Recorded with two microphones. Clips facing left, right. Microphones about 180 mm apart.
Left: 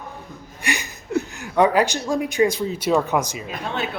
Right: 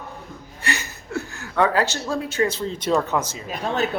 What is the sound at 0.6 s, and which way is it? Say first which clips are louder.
A woman's voice: left 1 dB; 15° left (ahead or behind).